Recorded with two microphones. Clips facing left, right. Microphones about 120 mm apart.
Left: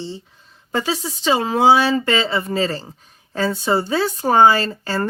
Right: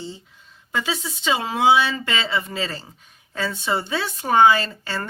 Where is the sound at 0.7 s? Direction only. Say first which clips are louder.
Left 4 dB; 40° left (ahead or behind).